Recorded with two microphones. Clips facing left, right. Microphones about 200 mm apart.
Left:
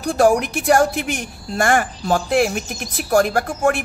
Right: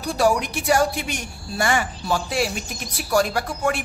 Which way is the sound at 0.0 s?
50° left (ahead or behind).